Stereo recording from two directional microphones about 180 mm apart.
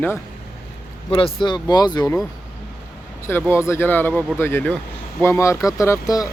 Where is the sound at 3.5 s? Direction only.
15° left (ahead or behind).